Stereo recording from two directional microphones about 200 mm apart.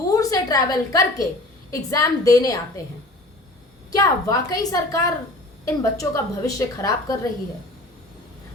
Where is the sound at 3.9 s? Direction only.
15° left (ahead or behind).